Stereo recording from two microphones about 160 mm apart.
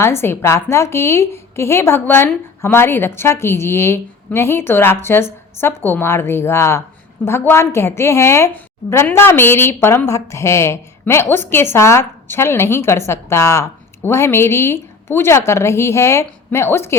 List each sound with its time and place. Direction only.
0.0 s a woman's voice: 15° left (ahead or behind)